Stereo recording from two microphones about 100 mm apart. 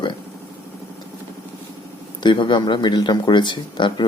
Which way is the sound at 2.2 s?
50° left (ahead or behind).